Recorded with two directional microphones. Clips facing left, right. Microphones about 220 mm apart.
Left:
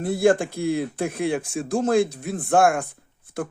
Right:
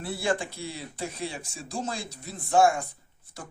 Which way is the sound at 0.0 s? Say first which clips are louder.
Left 10 dB; 45° left (ahead or behind).